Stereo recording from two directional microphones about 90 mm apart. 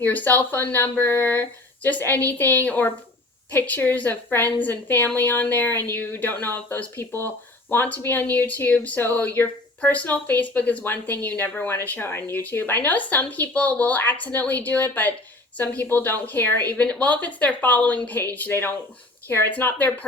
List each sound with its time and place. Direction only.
0.0 s a woman's voice: 20° left (ahead or behind)